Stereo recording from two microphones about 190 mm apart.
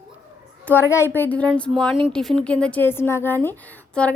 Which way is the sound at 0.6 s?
10° left (ahead or behind).